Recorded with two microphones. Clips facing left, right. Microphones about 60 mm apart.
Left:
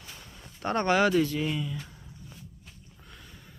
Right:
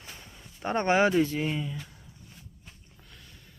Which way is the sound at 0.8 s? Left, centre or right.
Right.